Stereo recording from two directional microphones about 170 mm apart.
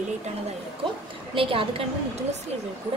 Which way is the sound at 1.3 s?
30° right (ahead or behind).